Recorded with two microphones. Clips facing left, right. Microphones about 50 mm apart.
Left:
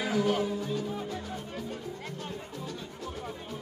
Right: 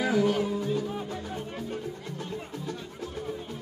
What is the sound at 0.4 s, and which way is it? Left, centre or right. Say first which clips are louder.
Music: right 3 dB; centre.